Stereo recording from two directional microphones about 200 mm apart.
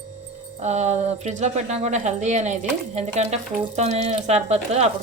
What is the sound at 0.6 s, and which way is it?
Speech, 35° right (ahead or behind).